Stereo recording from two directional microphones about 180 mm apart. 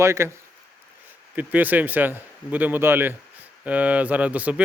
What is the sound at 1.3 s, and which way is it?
Speech, 10° right (ahead or behind).